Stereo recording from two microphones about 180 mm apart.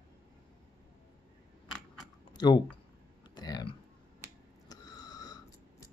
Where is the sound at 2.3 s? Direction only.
25° left (ahead or behind).